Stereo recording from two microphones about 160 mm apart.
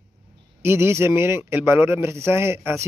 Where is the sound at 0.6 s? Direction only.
15° right (ahead or behind).